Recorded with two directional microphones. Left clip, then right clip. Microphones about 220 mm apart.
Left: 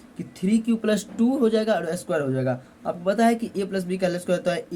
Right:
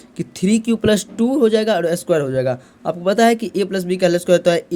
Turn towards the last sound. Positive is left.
turn(degrees=-45)  # may be behind; listen again after turning